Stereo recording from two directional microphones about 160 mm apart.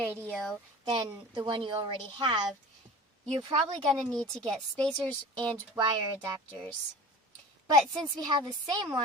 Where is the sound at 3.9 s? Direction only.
5° left (ahead or behind).